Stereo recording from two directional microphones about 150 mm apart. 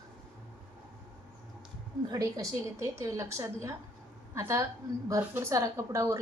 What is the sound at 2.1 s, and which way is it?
A woman's voice, 20° right (ahead or behind).